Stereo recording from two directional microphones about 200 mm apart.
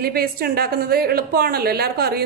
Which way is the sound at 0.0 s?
50° right (ahead or behind).